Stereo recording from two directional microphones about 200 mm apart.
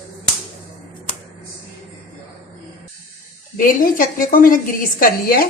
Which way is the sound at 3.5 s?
45° left (ahead or behind).